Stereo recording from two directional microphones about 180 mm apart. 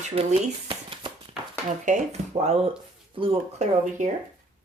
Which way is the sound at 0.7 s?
30° right (ahead or behind).